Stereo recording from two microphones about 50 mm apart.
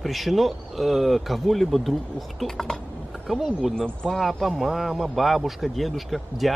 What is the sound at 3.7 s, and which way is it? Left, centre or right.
Speech, centre.